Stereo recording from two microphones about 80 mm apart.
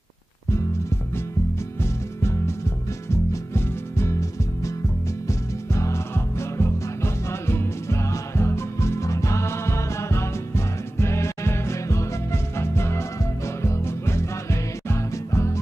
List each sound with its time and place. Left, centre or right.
1.8 s music: left
3.5 s music: left